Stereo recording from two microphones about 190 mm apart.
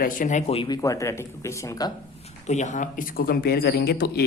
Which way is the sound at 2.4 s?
40° left (ahead or behind).